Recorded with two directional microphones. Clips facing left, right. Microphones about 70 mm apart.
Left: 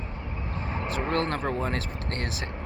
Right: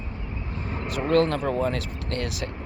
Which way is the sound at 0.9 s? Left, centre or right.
Left.